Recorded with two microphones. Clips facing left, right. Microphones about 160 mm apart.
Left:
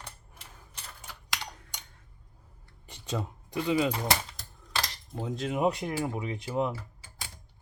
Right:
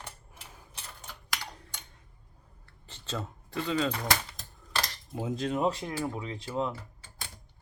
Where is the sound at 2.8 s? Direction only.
15° left (ahead or behind).